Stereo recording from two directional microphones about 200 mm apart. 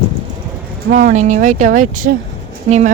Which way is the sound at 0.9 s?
40° right (ahead or behind).